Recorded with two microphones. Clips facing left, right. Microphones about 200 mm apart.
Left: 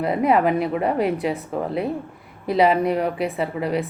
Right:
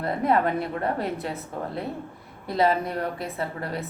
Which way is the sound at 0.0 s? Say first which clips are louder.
Left 5 dB; 90° left.